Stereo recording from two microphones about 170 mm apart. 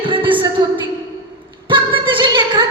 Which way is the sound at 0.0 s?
30° right (ahead or behind).